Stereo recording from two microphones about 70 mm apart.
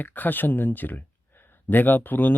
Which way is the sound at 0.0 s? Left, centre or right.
Left.